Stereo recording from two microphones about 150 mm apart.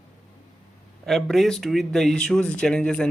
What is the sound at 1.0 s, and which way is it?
Speech, centre (ahead or behind).